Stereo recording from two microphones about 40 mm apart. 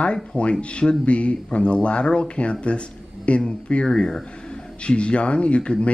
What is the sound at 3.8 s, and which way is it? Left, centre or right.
Speech, centre.